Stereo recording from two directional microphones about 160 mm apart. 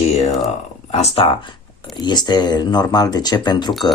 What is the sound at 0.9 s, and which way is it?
Speech, 40° left (ahead or behind).